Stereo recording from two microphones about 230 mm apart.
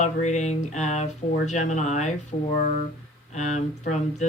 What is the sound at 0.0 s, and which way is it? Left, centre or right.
Speech, left.